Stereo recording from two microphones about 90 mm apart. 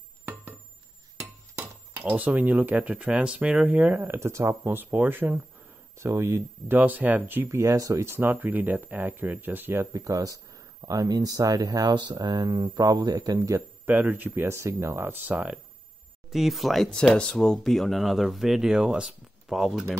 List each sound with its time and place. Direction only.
2.0 s speech: 20° right (ahead or behind)
5.9 s speech: 35° right (ahead or behind)
6.7 s speech: 20° right (ahead or behind)
9.9 s speech: 35° right (ahead or behind)
13.6 s speech: 20° right (ahead or behind)
16.3 s speech: centre (ahead or behind)